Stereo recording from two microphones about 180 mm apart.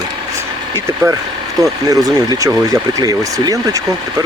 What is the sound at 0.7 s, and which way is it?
Speech, 15° right (ahead or behind).